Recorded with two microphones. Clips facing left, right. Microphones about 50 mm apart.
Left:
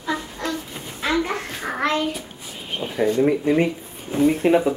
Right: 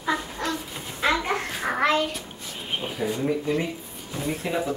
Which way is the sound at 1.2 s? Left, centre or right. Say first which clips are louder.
Right 1 dB; centre.